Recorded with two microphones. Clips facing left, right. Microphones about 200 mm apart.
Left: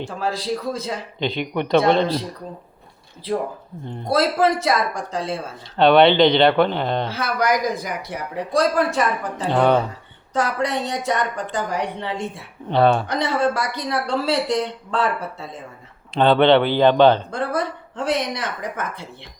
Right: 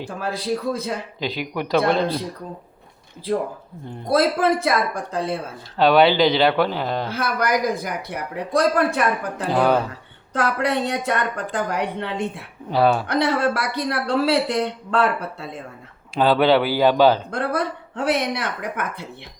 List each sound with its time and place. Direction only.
0.2 s speech: 55° right (ahead or behind)
1.2 s speech: 5° right (ahead or behind)
4.1 s speech: 55° right (ahead or behind)
5.7 s speech: centre (ahead or behind)
7.1 s speech: 55° right (ahead or behind)
9.5 s speech: 5° right (ahead or behind)
10.3 s speech: 60° right (ahead or behind)
12.7 s speech: 5° right (ahead or behind)
13.1 s speech: 60° right (ahead or behind)
16.1 s speech: 5° right (ahead or behind)
17.3 s speech: 60° right (ahead or behind)